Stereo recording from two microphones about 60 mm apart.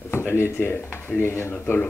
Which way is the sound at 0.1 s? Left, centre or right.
Left.